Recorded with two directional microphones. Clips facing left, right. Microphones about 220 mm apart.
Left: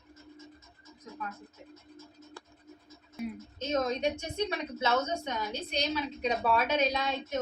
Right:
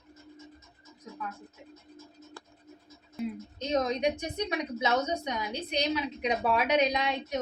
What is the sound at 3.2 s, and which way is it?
A woman's voice, 15° right (ahead or behind).